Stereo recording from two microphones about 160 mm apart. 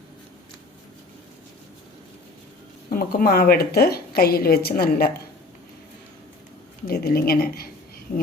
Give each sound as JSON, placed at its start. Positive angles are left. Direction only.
{"t": 2.9, "sound": "a woman's voice", "side_deg": 65}
{"t": 6.8, "sound": "a woman's voice", "side_deg": 75}